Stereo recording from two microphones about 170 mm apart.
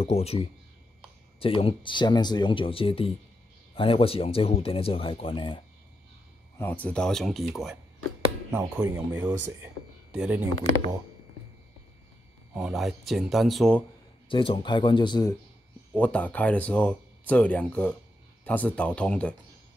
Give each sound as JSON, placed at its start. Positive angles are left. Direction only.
{"t": 0.0, "sound": "speech", "side_deg": 35}
{"t": 6.6, "sound": "speech", "side_deg": 10}
{"t": 10.1, "sound": "speech", "side_deg": -5}
{"t": 12.5, "sound": "speech", "side_deg": -5}
{"t": 14.3, "sound": "speech", "side_deg": 30}
{"t": 15.9, "sound": "speech", "side_deg": 5}